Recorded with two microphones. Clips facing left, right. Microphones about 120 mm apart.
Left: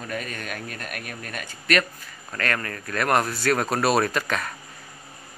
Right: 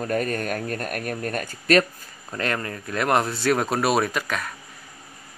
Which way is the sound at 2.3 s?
20° right (ahead or behind).